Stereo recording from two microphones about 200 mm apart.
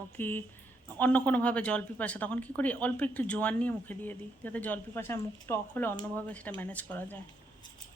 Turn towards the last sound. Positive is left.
turn(degrees=10)  # may be behind; listen again after turning